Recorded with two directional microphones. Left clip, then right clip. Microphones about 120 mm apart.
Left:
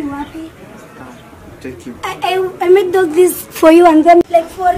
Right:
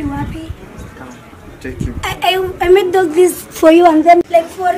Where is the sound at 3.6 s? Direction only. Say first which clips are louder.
Left 1 dB; 30° left (ahead or behind).